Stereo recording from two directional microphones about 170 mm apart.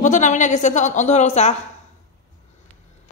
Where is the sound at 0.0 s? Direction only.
45° left (ahead or behind).